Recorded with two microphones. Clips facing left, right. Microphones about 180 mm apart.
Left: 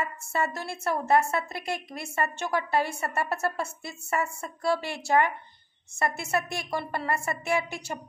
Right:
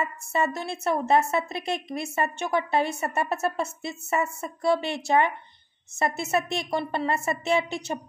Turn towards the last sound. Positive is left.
turn(degrees=-20)  # may be behind; listen again after turning